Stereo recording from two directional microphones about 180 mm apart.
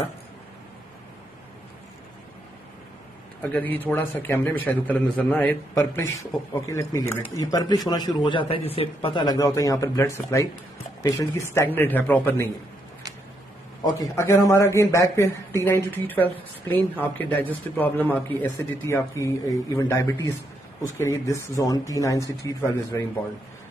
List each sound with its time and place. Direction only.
3.5 s a man's voice: 10° left (ahead or behind)
13.9 s speech: 15° left (ahead or behind)